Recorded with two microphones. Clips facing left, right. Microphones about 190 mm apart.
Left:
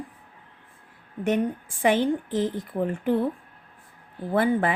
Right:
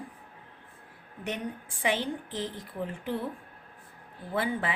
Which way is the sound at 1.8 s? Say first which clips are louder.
Left 8 dB; 50° left (ahead or behind).